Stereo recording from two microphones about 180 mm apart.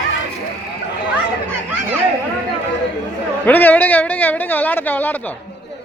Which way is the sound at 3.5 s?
10° left (ahead or behind).